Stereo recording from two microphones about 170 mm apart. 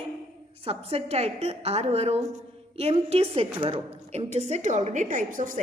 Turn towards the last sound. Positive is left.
turn(degrees=-50)  # may be behind; listen again after turning